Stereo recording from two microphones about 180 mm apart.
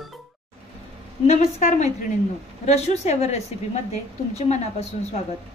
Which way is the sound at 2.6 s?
35° left (ahead or behind).